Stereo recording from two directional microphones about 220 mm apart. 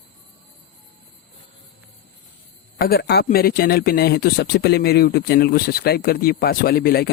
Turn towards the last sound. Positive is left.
turn(degrees=45)  # may be behind; listen again after turning